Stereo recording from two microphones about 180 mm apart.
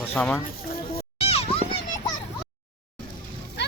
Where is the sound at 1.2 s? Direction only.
35° left (ahead or behind).